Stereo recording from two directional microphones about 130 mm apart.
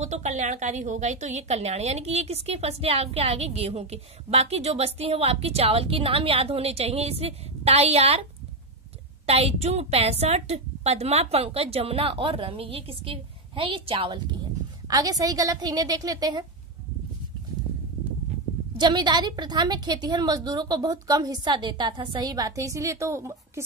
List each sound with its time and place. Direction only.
0.0 s a woman's voice: 65° right (ahead or behind); by 14.2 s 45° right (ahead or behind)
14.9 s a woman's voice: 30° right (ahead or behind)
18.8 s a woman's voice: 35° right (ahead or behind)